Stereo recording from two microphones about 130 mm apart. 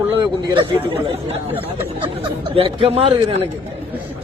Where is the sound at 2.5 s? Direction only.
45° right (ahead or behind).